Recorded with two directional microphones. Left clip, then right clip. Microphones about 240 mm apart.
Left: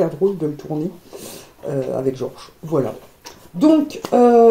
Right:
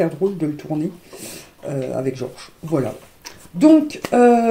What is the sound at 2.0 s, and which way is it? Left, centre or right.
Speech, right.